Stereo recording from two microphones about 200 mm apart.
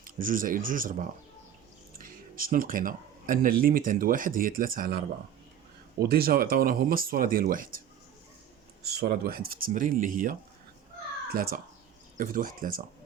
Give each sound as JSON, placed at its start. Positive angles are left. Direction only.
{"t": 0.0, "sound": "speech", "side_deg": -45}
{"t": 8.8, "sound": "speech", "side_deg": -50}
{"t": 11.3, "sound": "speech", "side_deg": -45}